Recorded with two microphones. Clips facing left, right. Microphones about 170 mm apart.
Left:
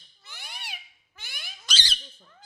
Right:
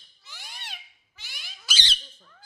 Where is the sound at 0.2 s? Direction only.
60° left (ahead or behind).